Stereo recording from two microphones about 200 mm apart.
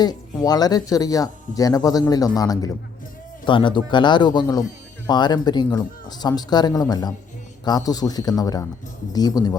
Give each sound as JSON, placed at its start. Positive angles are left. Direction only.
{"t": 0.0, "sound": "speech", "side_deg": 20}